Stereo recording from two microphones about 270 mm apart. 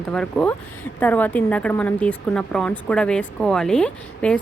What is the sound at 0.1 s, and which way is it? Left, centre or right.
Speech, centre.